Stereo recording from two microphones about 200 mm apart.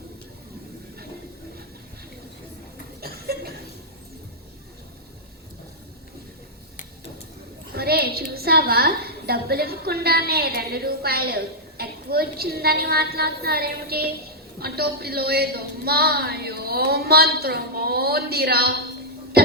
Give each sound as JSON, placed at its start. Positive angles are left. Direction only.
{"t": 3.0, "sound": "chuckle", "side_deg": -50}
{"t": 7.7, "sound": "a woman's voice", "side_deg": -50}